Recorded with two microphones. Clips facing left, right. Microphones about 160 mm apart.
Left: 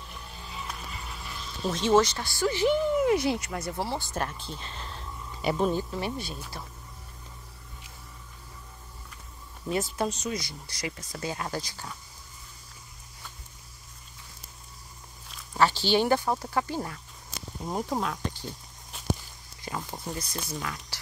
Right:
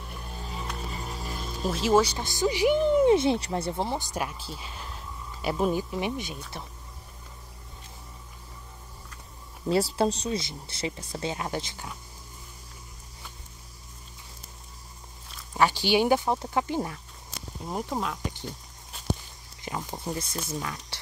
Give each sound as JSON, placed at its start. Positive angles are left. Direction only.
{"t": 0.0, "sound": "a sound", "side_deg": -50}
{"t": 0.7, "sound": "music", "side_deg": -40}
{"t": 1.7, "sound": "speech", "side_deg": -5}
{"t": 9.7, "sound": "speech", "side_deg": -30}
{"t": 15.5, "sound": "speech", "side_deg": -15}
{"t": 17.6, "sound": "speech", "side_deg": 0}
{"t": 19.6, "sound": "speech", "side_deg": -20}